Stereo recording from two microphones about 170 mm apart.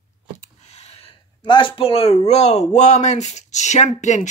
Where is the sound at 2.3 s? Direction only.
40° left (ahead or behind).